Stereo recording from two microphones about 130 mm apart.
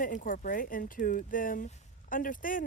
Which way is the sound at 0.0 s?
90° left.